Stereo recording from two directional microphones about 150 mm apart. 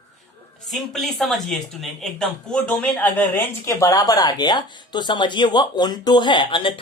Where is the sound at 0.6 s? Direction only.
Centre (ahead or behind).